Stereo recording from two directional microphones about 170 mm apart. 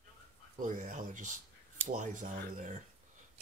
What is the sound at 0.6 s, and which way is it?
Speech, 50° right (ahead or behind).